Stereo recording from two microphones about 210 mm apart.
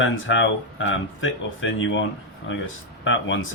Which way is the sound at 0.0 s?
65° left (ahead or behind).